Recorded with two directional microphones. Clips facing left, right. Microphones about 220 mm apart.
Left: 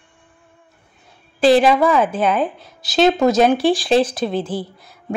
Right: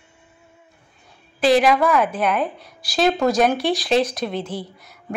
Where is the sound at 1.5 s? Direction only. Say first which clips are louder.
Left 3 dB; 30° left (ahead or behind).